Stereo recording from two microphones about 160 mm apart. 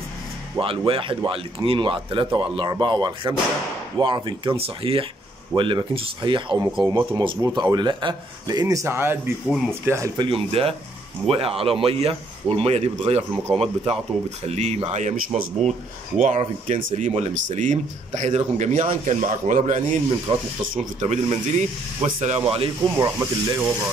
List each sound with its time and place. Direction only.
0.6 s speech: 35° right (ahead or behind); by 10.2 s 20° right (ahead or behind)
10.3 s speech: 35° right (ahead or behind)
20.3 s speech: 35° right (ahead or behind)
20.7 s speech: 45° right (ahead or behind)
22.9 s speech: 20° right (ahead or behind)